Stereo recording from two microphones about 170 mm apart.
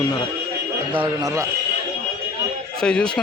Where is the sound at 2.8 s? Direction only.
5° left (ahead or behind).